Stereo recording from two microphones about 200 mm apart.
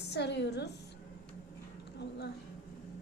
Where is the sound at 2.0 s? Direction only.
55° left (ahead or behind).